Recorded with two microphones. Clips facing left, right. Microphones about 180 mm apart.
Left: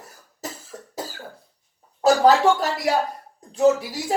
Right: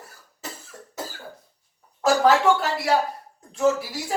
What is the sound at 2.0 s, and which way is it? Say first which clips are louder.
Speech: left 3 dB; 35° left (ahead or behind).